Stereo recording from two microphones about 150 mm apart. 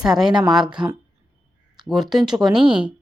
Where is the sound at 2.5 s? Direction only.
5° right (ahead or behind).